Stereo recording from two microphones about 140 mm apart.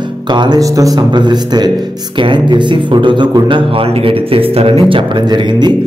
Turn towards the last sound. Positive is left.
turn(degrees=-45)  # may be behind; listen again after turning